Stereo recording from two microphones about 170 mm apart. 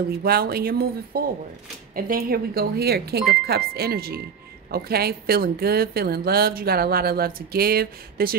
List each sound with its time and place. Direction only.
0.2 s a woman's voice: 65° right (ahead or behind)